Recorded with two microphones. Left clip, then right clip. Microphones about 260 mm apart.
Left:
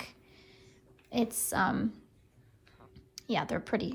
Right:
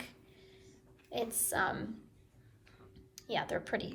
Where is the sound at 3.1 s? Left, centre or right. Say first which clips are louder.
Left 3 dB; left.